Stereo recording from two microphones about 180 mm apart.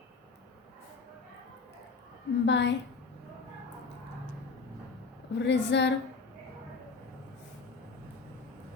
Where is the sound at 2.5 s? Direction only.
75° left (ahead or behind).